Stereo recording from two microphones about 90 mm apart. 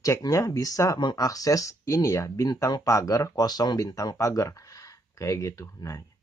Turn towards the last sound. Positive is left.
turn(degrees=35)  # may be behind; listen again after turning